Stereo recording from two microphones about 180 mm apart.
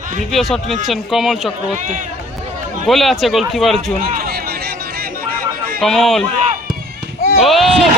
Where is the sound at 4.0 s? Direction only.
55° right (ahead or behind).